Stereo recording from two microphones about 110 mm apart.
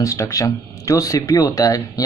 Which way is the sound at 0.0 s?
30° left (ahead or behind).